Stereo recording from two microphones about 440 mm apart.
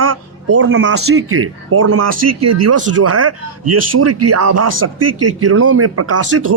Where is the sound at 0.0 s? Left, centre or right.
Right.